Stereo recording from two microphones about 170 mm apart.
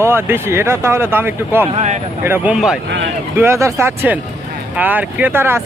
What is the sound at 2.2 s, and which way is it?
Speech, 10° right (ahead or behind).